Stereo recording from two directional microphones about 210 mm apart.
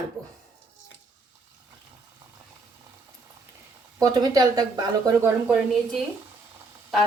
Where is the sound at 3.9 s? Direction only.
15° right (ahead or behind).